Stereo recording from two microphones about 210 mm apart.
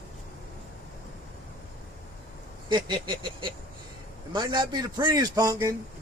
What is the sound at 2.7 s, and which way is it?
A man's voice, 20° right (ahead or behind).